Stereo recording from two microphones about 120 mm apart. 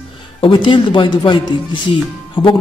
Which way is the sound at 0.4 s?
45° left (ahead or behind).